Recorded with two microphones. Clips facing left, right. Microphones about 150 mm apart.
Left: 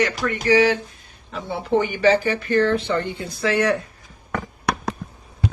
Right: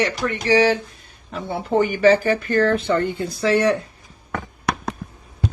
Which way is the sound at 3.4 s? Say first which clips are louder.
Right 2 dB; 30° right (ahead or behind).